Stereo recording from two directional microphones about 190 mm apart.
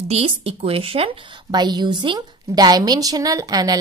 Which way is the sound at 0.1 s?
30° right (ahead or behind).